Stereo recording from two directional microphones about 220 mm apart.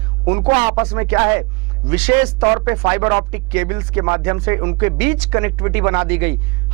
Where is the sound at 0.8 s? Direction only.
10° right (ahead or behind).